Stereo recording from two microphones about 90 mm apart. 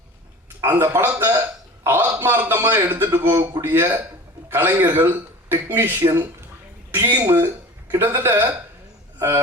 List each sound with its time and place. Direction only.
0.6 s a man's voice: 25° right (ahead or behind)